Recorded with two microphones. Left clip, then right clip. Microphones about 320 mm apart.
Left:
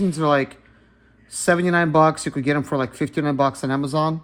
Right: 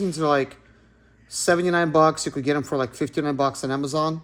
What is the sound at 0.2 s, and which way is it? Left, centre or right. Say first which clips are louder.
Speech: left 2 dB; left.